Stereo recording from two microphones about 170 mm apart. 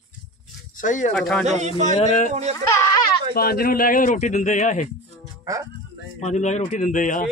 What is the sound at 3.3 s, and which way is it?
A man's voice, 65° left (ahead or behind).